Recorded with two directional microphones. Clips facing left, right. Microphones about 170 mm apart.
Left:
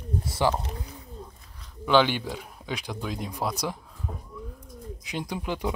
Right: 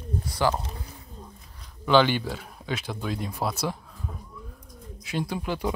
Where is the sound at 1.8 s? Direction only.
5° left (ahead or behind).